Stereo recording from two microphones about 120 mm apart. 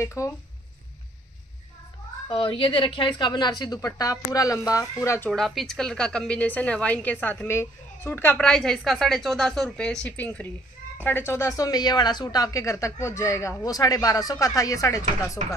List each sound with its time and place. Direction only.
0.0 s speech: 25° left (ahead or behind)
2.2 s speech: 45° left (ahead or behind); by 5.3 s 25° left (ahead or behind)
5.3 s a woman's voice: centre (ahead or behind); by 15.3 s 25° left (ahead or behind)